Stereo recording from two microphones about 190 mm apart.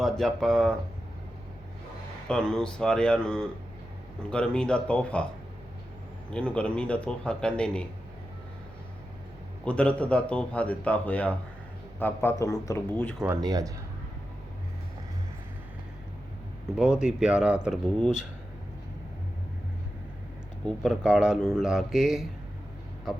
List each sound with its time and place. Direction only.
0.0 s speech: centre (ahead or behind)
2.2 s speech: 5° left (ahead or behind)
6.3 s speech: 5° left (ahead or behind)
9.6 s a man's voice: 5° left (ahead or behind)
13.2 s speech: 15° right (ahead or behind)
16.7 s speech: 5° right (ahead or behind)
20.7 s speech: centre (ahead or behind)